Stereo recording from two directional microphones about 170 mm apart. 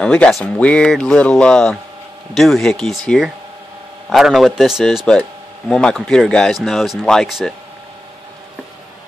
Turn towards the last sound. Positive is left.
turn(degrees=0)  # may be behind; listen again after turning